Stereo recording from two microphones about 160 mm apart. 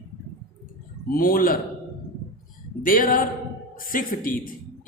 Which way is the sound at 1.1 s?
65° left (ahead or behind).